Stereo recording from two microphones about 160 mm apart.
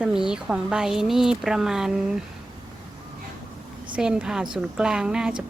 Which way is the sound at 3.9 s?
5° right (ahead or behind).